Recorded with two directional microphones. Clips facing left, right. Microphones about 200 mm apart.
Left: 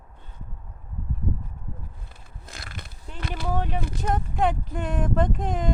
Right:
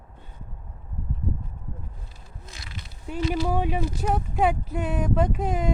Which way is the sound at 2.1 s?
55° left (ahead or behind).